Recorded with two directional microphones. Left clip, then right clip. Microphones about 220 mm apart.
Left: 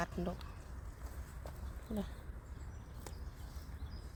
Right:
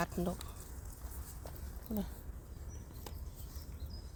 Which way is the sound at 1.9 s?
10° right (ahead or behind).